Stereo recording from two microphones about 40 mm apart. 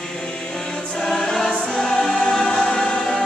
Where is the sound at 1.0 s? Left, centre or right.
Centre.